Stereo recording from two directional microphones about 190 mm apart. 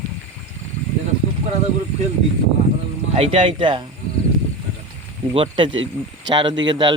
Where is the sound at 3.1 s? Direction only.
30° right (ahead or behind).